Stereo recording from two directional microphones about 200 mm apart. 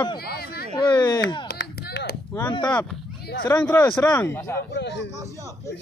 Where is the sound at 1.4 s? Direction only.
55° left (ahead or behind).